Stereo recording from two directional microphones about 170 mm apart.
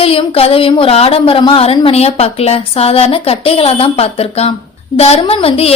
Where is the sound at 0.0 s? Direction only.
35° left (ahead or behind).